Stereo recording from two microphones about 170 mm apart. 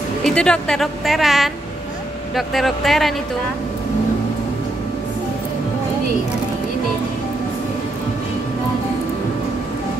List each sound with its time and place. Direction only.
0.2 s a woman's voice: 5° left (ahead or behind)